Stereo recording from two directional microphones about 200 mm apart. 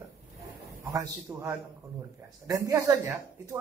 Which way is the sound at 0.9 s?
15° right (ahead or behind).